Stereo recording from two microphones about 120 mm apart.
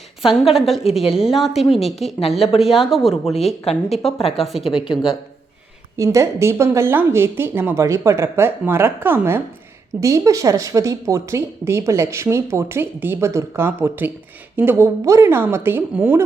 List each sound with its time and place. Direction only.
0.5 s speech: centre (ahead or behind)
4.2 s speech: 55° left (ahead or behind)
4.4 s speech: centre (ahead or behind)
4.7 s speech: 45° left (ahead or behind)
6.0 s a woman's voice: 25° right (ahead or behind)